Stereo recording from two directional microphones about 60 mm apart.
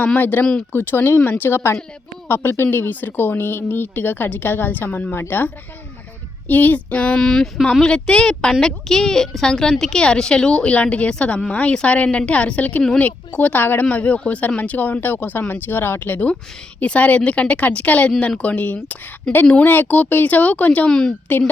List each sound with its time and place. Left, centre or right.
0.0 s a woman's voice: left
6.5 s a woman's voice: left
19.3 s a woman's voice: centre
19.6 s a woman's voice: left